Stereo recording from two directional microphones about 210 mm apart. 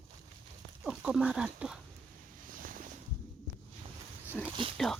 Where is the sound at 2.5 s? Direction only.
40° right (ahead or behind).